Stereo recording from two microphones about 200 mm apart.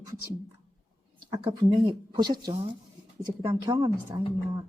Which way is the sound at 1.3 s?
25° right (ahead or behind).